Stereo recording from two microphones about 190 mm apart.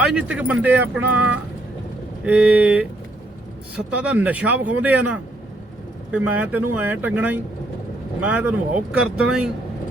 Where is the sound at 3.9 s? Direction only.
5° right (ahead or behind).